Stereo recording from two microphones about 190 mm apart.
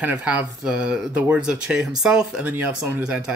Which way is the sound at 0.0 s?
5° right (ahead or behind).